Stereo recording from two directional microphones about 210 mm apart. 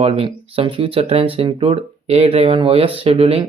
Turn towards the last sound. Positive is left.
turn(degrees=-25)  # may be behind; listen again after turning